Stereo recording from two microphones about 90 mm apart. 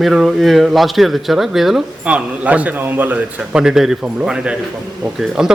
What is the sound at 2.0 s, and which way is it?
A man's voice, 15° right (ahead or behind).